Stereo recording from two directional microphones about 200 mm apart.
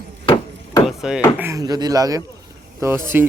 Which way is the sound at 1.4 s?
15° right (ahead or behind).